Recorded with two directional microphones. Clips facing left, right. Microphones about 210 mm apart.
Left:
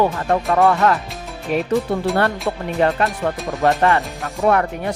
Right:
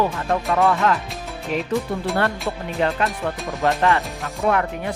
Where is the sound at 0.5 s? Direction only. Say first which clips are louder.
Left 3 dB; 45° left (ahead or behind).